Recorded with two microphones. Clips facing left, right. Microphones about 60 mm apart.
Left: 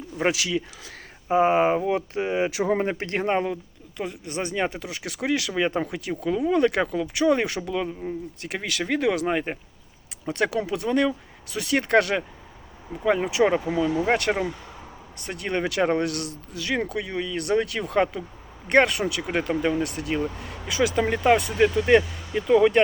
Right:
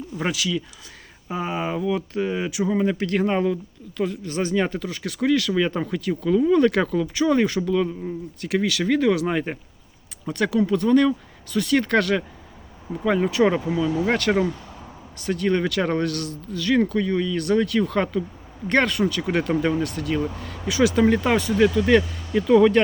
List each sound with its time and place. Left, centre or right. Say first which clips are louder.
1.3 s speech: left 7 dB; left
2.5 s speech: right 1 dB; left
2.9 s speech: right 2 dB; left; by 9.6 s centre
10.2 s speech: right 3 dB; left
10.7 s speech: right 5 dB; centre
13.1 s speech: right 1 dB; centre
19.1 s speech: right 3 dB; centre
19.8 s speech: right 2 dB; left
20.9 s speech: right 1 dB; centre
21.6 s speech: right 3 dB; left
22.3 s speech: right 3 dB; centre